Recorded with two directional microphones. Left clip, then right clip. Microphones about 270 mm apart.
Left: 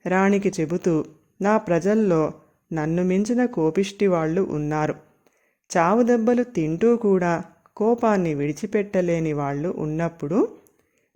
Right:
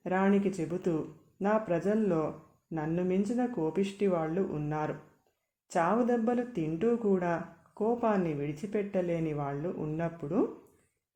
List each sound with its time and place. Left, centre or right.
0.0 s speech: left